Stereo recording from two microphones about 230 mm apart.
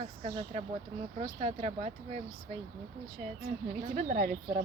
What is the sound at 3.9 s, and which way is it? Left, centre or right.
Speech, right.